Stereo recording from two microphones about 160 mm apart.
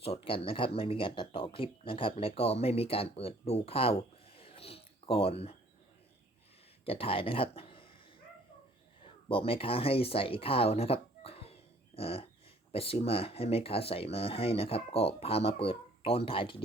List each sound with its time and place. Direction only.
0.0 s speech: 35° left (ahead or behind)
6.8 s speech: 35° left (ahead or behind)
9.3 s speech: 35° left (ahead or behind)
11.9 s a sound: 35° left (ahead or behind)
12.7 s speech: 35° left (ahead or behind)